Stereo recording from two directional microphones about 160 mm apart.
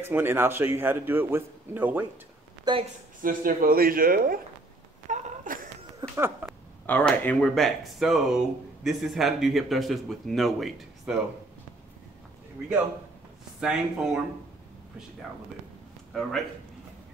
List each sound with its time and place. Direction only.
0.0 s a man's voice: 15° right (ahead or behind)
2.7 s speech: 25° right (ahead or behind)
3.2 s speech: 60° right (ahead or behind)
5.0 s a sound: 50° right (ahead or behind)
5.9 s a sound: 15° right (ahead or behind)
6.9 s speech: 10° left (ahead or behind)
13.6 s speech: 5° right (ahead or behind)
16.1 s speech: centre (ahead or behind)